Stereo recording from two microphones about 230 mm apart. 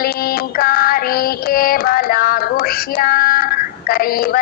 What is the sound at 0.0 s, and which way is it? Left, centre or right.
Child singing, left.